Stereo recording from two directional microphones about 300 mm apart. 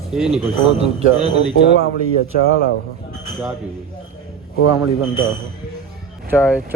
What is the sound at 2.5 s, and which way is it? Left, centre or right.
Speech, left.